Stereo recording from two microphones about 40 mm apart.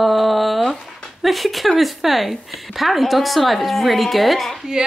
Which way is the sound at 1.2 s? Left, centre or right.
Centre.